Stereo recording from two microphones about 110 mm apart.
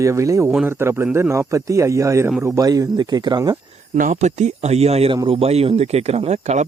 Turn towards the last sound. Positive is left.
turn(degrees=-90)